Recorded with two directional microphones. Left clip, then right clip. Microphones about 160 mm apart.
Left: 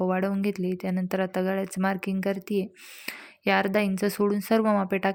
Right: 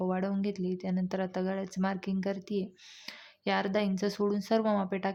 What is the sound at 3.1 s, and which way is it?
A woman's voice, 25° left (ahead or behind).